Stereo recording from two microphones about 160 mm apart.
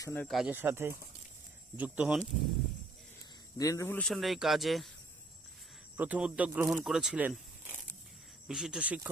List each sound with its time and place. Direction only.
0.0 s speech: 15° left (ahead or behind)
0.3 s speech: centre (ahead or behind)
0.5 s speech: 15° right (ahead or behind)
3.6 s speech: 20° left (ahead or behind)
4.0 s speech: centre (ahead or behind)
6.0 s speech: 10° right (ahead or behind)